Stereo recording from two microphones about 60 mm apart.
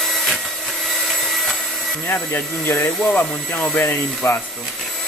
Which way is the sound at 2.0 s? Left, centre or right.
Left.